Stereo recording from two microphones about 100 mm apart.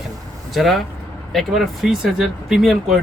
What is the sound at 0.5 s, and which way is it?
Speech, centre (ahead or behind).